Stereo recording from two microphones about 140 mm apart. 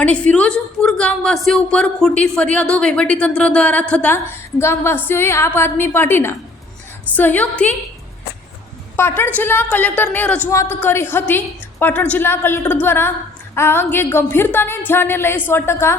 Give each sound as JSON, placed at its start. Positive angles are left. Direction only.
{"t": 0.0, "sound": "a woman's voice", "side_deg": 10}
{"t": 9.0, "sound": "a woman's voice", "side_deg": 15}